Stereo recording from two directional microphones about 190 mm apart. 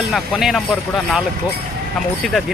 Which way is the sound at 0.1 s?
Centre (ahead or behind).